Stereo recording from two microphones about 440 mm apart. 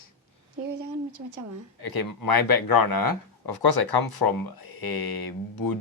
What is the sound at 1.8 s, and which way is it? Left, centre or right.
Speech, left.